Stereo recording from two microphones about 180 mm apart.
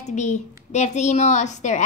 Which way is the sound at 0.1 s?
40° left (ahead or behind).